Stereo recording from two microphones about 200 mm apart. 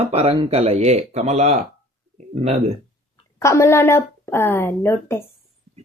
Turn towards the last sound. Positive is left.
turn(degrees=10)  # may be behind; listen again after turning